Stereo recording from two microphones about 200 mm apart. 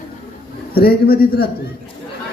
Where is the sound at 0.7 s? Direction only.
50° left (ahead or behind).